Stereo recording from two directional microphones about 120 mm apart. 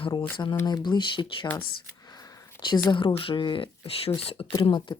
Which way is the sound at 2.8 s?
45° left (ahead or behind).